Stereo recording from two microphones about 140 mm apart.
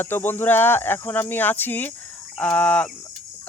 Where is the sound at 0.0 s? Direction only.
15° left (ahead or behind).